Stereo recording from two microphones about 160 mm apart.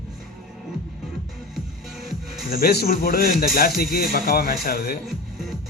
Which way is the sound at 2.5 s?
80° left.